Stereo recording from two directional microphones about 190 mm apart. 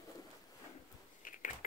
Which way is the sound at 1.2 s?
45° left (ahead or behind).